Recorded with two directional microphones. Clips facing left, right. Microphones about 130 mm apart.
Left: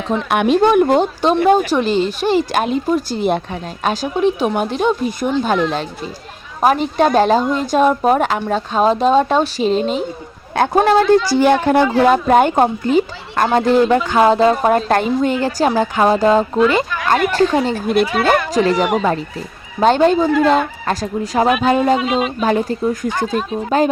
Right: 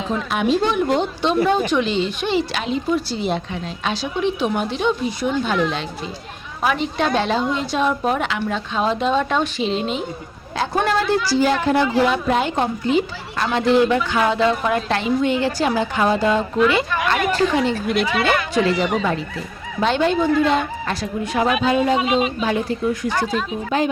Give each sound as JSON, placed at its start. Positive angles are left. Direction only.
{"t": 0.3, "sound": "a woman's voice", "side_deg": 60}
{"t": 11.3, "sound": "speech", "side_deg": 60}
{"t": 17.6, "sound": "speech", "side_deg": 40}